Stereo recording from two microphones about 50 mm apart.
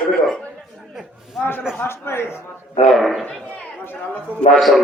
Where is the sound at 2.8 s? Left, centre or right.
Centre.